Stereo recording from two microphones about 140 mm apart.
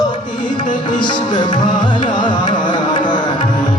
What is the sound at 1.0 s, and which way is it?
Carnatic music, 35° left (ahead or behind).